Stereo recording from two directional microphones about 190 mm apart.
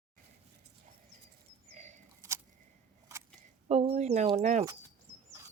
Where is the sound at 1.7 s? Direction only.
40° right (ahead or behind).